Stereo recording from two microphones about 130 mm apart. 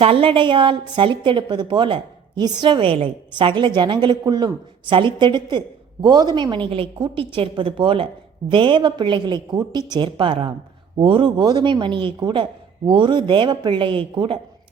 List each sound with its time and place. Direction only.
0.0 s a woman's voice: 45° right (ahead or behind)